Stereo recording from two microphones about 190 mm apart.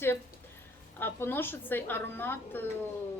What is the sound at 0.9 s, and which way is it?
A woman's voice, 10° left (ahead or behind).